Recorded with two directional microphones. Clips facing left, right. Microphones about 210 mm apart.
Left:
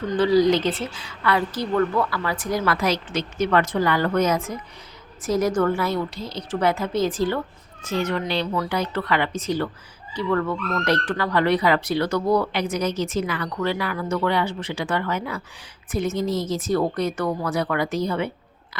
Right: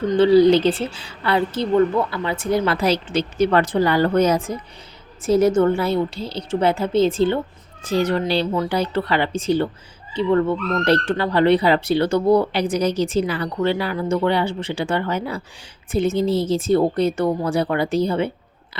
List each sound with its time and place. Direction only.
0.1 s speech: 25° right (ahead or behind)